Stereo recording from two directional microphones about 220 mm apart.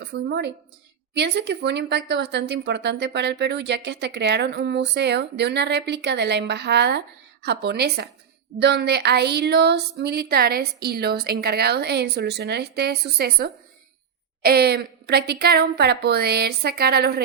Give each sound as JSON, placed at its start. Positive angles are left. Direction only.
{"t": 0.0, "sound": "a woman's voice", "side_deg": -50}